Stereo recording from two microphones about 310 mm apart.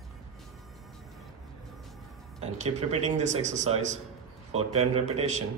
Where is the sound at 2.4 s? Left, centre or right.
Right.